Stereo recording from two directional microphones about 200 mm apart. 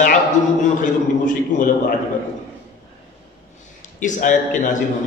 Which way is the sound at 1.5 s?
40° left (ahead or behind).